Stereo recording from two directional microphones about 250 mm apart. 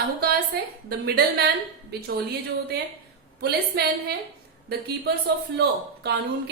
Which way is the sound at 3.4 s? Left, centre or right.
Right.